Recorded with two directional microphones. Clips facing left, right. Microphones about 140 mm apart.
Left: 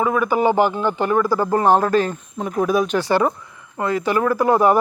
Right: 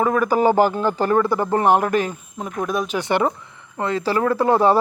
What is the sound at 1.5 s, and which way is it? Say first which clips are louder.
Speech: left 1 dB; 20° right (ahead or behind).